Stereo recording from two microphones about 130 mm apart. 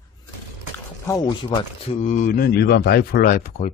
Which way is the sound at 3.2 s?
90° left.